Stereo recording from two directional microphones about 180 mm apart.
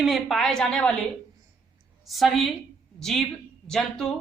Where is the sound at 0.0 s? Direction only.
Centre (ahead or behind).